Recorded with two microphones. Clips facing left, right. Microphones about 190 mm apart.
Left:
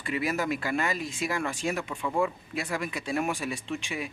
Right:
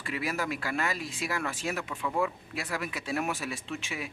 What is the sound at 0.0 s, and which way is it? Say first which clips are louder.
Speech: left 4 dB; centre (ahead or behind).